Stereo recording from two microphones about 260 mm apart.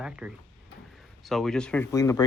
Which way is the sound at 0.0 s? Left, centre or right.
Centre.